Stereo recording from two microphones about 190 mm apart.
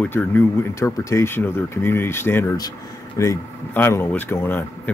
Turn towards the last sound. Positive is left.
turn(degrees=10)  # may be behind; listen again after turning